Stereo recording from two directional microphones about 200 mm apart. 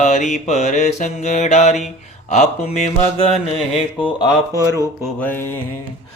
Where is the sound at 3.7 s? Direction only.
25° left (ahead or behind).